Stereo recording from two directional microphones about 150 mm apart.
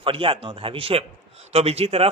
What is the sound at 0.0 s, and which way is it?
A man's voice, 35° right (ahead or behind).